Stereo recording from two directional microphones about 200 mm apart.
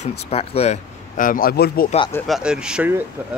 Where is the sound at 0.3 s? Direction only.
30° left (ahead or behind); by 1.9 s 50° left (ahead or behind).